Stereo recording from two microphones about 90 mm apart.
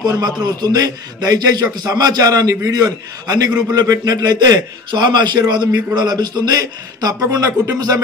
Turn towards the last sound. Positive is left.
turn(degrees=-45)  # may be behind; listen again after turning